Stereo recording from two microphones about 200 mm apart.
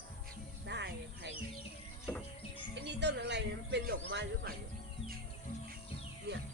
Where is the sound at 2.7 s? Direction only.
60° right (ahead or behind).